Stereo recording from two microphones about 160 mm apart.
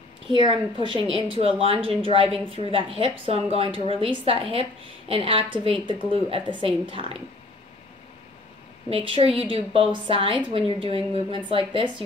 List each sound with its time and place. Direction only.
0.3 s a woman's voice: 35° right (ahead or behind)
8.9 s a woman's voice: 35° right (ahead or behind)